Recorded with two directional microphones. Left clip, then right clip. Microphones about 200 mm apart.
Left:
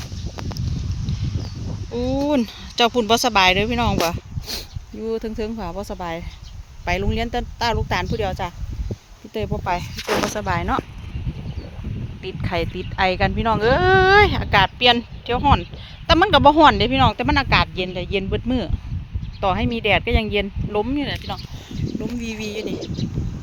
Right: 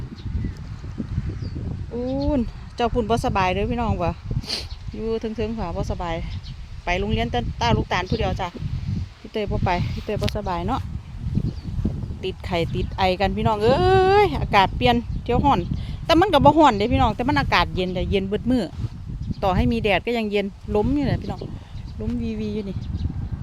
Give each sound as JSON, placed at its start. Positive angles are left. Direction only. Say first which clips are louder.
{"t": 2.2, "sound": "speech", "louder": "left 4 dB", "side_deg": 5}
{"t": 12.2, "sound": "speech", "louder": "even", "side_deg": -20}